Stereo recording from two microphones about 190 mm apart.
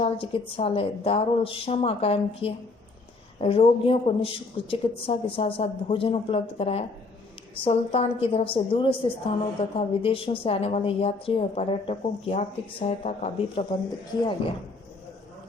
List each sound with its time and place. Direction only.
0.0 s a woman's voice: 30° left (ahead or behind)